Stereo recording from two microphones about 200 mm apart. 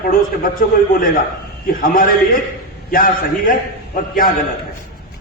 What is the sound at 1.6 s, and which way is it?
A man's voice, 45° left (ahead or behind).